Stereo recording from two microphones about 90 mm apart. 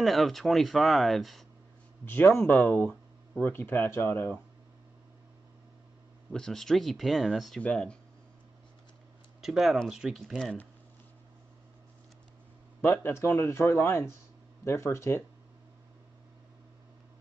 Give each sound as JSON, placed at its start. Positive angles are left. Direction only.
{"t": 0.0, "sound": "speech", "side_deg": 0}
{"t": 2.0, "sound": "speech", "side_deg": 20}
{"t": 3.5, "sound": "speech", "side_deg": 20}
{"t": 6.3, "sound": "speech", "side_deg": 5}
{"t": 7.6, "sound": "speech", "side_deg": 10}
{"t": 9.4, "sound": "speech", "side_deg": -5}
{"t": 12.8, "sound": "speech", "side_deg": 25}